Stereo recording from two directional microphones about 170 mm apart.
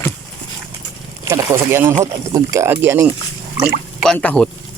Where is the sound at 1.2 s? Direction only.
15° right (ahead or behind).